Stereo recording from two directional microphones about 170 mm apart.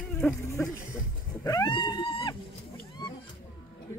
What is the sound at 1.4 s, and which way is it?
Wild animals, 25° left (ahead or behind).